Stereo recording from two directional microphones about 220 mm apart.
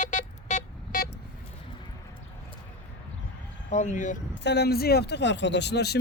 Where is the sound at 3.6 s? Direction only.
35° left (ahead or behind).